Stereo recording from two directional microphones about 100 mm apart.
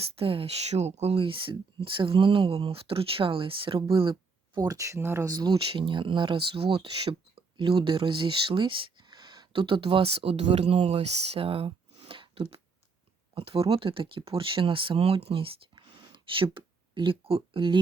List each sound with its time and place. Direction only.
0.0 s speech: 70° right (ahead or behind)
4.6 s speech: 35° right (ahead or behind)
5.2 s speech: 40° right (ahead or behind)
5.5 s speech: 60° right (ahead or behind)